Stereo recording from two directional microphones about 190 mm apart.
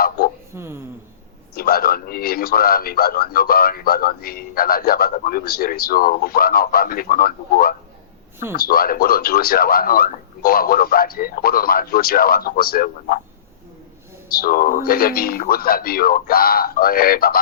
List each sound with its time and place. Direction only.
0.5 s speech: 15° right (ahead or behind)
1.5 s a man's voice: 50° left (ahead or behind)
14.3 s a man's voice: 50° left (ahead or behind)